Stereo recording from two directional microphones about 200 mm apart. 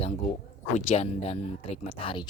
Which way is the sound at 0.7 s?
35° left (ahead or behind).